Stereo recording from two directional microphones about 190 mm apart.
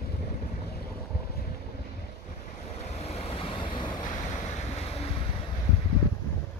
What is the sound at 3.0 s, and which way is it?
Vehicle, 30° left (ahead or behind).